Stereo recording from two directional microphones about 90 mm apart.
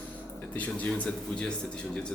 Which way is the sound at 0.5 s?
15° left (ahead or behind).